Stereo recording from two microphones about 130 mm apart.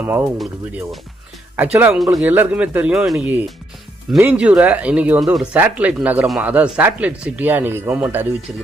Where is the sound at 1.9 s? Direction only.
Centre (ahead or behind).